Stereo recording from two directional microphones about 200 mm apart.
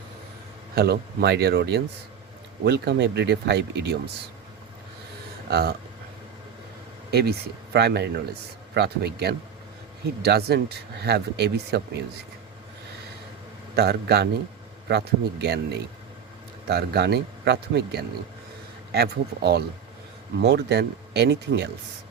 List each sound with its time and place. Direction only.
0.8 s speech: 55° right (ahead or behind)
5.5 s speech: 55° right (ahead or behind)
7.1 s speech: 50° right (ahead or behind)
13.7 s speech: 55° right (ahead or behind)
16.6 s speech: 55° right (ahead or behind)